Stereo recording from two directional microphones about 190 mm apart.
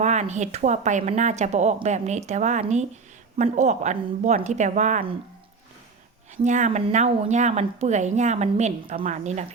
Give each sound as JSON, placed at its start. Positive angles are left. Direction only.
{"t": 0.0, "sound": "a woman's voice", "side_deg": -35}
{"t": 6.3, "sound": "a woman's voice", "side_deg": -40}